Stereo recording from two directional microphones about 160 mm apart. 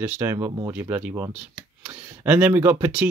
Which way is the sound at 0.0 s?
10° right (ahead or behind).